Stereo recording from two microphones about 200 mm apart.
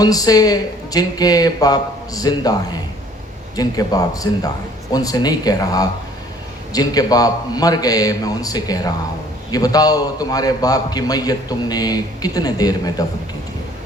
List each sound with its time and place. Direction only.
0.0 s a man's voice: 20° left (ahead or behind)